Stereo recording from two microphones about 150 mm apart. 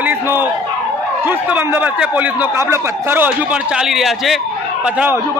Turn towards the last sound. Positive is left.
turn(degrees=0)  # may be behind; listen again after turning